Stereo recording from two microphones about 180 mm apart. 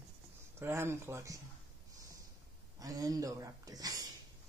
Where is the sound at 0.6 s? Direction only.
15° right (ahead or behind).